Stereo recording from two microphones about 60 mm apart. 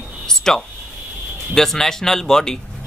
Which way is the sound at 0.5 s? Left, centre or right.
Centre.